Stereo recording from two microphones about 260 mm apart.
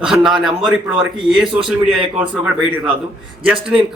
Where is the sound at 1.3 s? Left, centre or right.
Centre.